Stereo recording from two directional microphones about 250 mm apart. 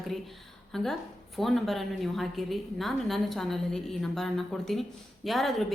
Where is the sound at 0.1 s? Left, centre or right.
Centre.